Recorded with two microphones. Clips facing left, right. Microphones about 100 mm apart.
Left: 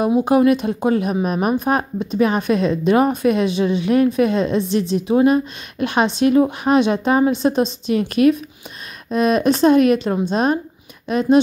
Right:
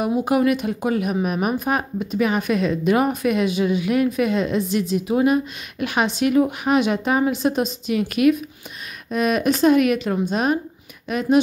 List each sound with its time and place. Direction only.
0.0 s a woman's voice: 30° left (ahead or behind)